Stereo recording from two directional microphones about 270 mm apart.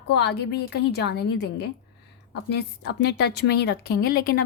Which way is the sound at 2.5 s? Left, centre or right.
Left.